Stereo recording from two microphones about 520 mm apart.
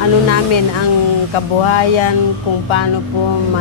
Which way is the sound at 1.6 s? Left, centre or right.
Left.